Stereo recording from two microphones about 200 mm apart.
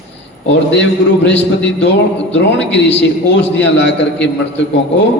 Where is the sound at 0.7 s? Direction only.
60° left (ahead or behind).